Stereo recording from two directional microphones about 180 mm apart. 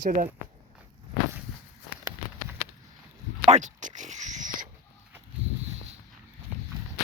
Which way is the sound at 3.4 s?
40° right (ahead or behind).